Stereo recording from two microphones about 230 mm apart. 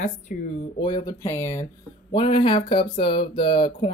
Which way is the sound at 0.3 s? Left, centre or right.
Left.